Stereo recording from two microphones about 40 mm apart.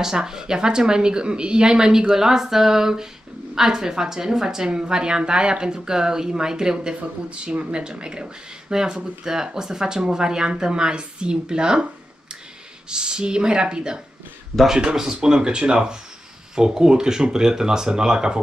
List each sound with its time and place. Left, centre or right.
0.0 s a woman's voice: centre
12.9 s a woman's voice: right